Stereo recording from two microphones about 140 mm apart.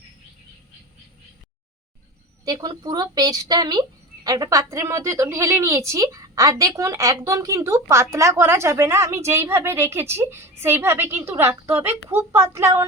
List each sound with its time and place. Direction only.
2.4 s a woman's voice: 30° right (ahead or behind)